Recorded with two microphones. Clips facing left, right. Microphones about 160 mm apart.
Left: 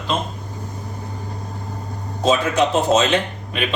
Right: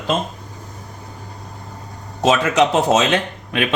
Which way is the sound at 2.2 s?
85° right.